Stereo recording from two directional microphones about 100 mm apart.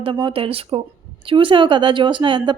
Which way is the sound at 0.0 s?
55° right (ahead or behind).